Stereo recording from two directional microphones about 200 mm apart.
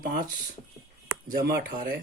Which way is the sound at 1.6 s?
50° right (ahead or behind).